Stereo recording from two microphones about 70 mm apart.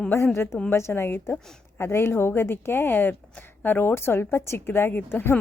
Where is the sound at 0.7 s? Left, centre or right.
Left.